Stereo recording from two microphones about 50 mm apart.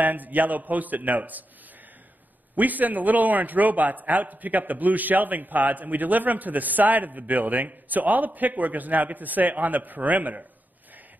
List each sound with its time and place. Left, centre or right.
0.0 s a man's voice: right
2.5 s a man's voice: right